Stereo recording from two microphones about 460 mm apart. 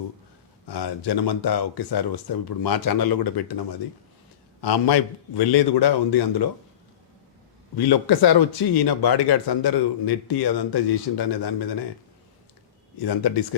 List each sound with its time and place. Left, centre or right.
0.7 s speech: left
7.8 s speech: left
13.0 s speech: left